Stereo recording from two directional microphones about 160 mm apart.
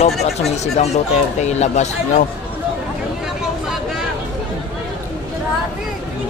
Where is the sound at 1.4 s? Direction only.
45° left (ahead or behind).